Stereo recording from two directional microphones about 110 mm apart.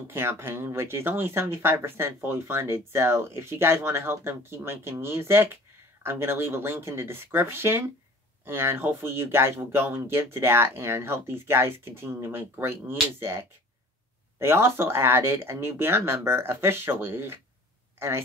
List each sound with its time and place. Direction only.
0.1 s speech: 20° right (ahead or behind)